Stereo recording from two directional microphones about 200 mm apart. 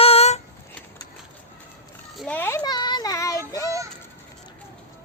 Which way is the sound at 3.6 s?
15° right (ahead or behind).